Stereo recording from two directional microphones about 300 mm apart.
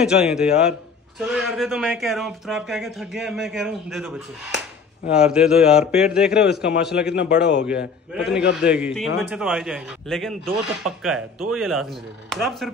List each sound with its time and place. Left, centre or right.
0.0 s speech: centre
6.6 s a man's voice: left
8.6 s speech: centre